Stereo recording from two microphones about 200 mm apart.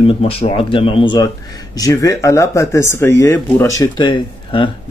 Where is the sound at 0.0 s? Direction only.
30° left (ahead or behind).